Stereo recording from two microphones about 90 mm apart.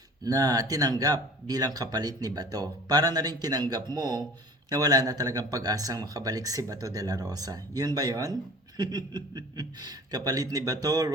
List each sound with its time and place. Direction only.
0.3 s speech: 40° right (ahead or behind)